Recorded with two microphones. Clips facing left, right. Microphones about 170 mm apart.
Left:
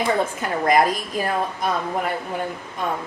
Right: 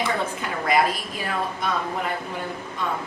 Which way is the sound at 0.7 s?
45° left (ahead or behind).